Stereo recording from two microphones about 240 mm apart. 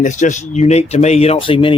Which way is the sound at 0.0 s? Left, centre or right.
Left.